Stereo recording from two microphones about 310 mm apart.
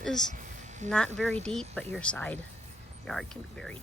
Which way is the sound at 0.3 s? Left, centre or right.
Right.